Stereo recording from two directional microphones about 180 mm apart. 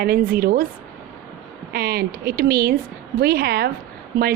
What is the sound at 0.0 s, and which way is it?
Speech, 55° right (ahead or behind).